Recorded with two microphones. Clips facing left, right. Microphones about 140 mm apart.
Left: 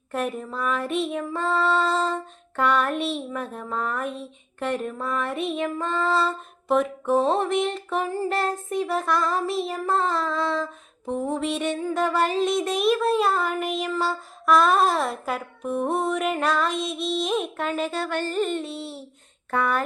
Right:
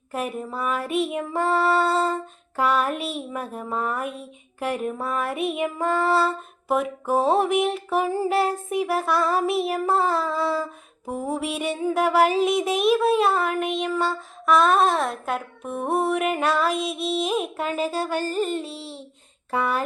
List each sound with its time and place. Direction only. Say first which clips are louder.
0.1 s female singing: left 1 dB; 5° right (ahead or behind)
0.4 s child singing: even; 10° right (ahead or behind)
4.6 s female singing: right 1 dB; 10° right (ahead or behind)
18.0 s child singing: right 1 dB; 10° right (ahead or behind)
18.3 s a sound: even; 35° right (ahead or behind)